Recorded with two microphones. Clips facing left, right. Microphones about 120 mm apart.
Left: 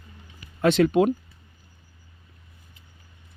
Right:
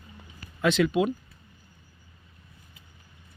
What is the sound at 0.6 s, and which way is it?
Speech, 45° left (ahead or behind).